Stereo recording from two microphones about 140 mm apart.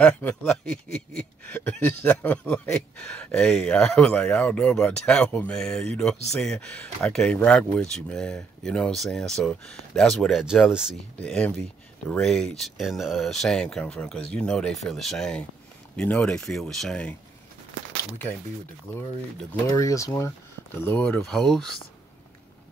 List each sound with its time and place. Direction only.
0.0 s speech: 10° left (ahead or behind)
11.1 s speech: 10° left (ahead or behind)
19.7 s speech: 25° left (ahead or behind)
21.3 s speech: 5° left (ahead or behind)